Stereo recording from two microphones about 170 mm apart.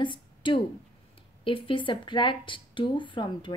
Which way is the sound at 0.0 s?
30° left (ahead or behind).